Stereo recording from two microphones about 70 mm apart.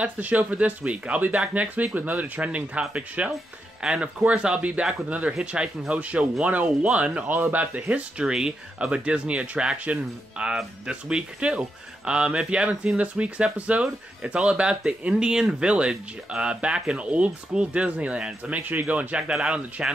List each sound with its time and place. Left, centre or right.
0.0 s speech: right